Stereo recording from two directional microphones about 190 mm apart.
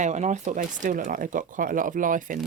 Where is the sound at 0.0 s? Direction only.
40° right (ahead or behind).